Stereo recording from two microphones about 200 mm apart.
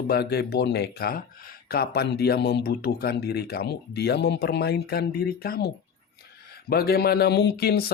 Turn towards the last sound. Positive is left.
turn(degrees=50)  # may be behind; listen again after turning